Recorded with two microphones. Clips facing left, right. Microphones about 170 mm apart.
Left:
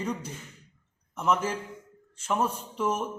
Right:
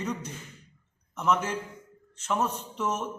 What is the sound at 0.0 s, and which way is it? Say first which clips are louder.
A man's voice: left 1 dB; 10° left (ahead or behind).